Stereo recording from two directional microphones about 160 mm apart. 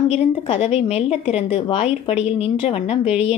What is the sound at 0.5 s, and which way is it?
A woman's voice, 45° left (ahead or behind).